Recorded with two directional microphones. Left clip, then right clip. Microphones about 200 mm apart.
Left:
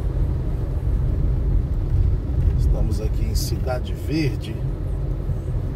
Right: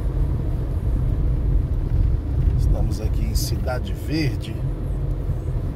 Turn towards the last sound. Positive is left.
turn(degrees=-30)  # may be behind; listen again after turning